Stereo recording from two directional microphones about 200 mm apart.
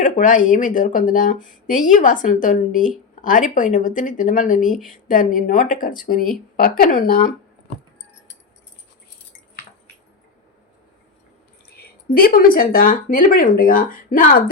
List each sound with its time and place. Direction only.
0.0 s speech: 40° left (ahead or behind)
11.8 s speech: 45° left (ahead or behind)